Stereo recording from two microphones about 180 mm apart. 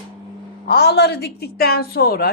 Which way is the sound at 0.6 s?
65° left (ahead or behind).